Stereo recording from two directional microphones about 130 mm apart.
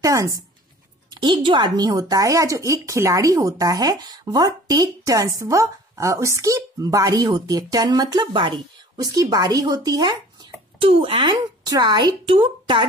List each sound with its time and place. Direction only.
0.0 s a sound: 25° right (ahead or behind)
1.1 s speech: 35° right (ahead or behind)
10.8 s a woman's voice: 45° right (ahead or behind)